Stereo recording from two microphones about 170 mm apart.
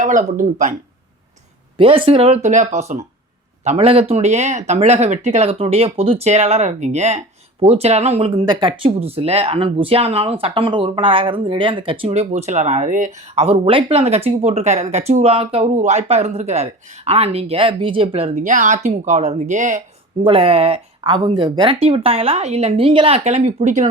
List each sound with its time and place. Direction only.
0.0 s speech: 50° right (ahead or behind)
1.8 s speech: 30° right (ahead or behind)
8.4 s speech: 25° right (ahead or behind); by 19.8 s 45° right (ahead or behind)
20.2 s speech: 35° right (ahead or behind)